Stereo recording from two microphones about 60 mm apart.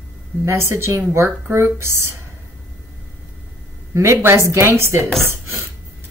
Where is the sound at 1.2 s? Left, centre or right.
Right.